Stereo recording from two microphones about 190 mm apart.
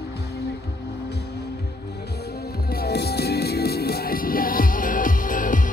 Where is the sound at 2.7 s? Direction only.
55° left (ahead or behind).